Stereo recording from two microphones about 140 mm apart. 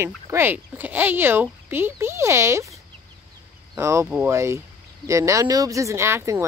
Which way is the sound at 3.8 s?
20° right (ahead or behind).